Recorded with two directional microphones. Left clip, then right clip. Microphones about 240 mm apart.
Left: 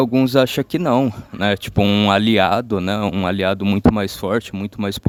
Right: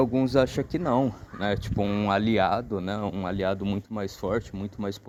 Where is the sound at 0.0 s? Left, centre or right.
Left.